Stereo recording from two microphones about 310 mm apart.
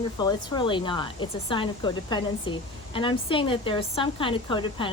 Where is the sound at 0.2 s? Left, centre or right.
Centre.